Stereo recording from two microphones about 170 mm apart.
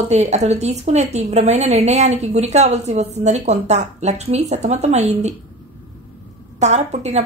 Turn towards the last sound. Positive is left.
turn(degrees=-40)  # may be behind; listen again after turning